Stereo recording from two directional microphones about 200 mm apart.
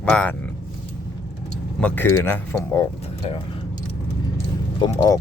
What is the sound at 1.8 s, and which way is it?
Speech, 10° left (ahead or behind).